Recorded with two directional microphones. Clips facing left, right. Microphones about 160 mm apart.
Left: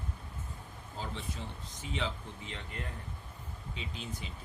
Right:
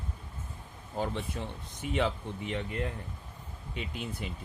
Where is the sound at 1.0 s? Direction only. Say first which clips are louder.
Right 7 dB; 55° right (ahead or behind).